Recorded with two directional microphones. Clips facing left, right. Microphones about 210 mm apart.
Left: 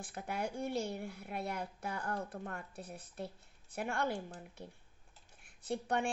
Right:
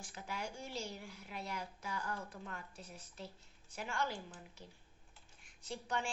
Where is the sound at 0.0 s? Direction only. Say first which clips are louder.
Left 6 dB; 55° left (ahead or behind).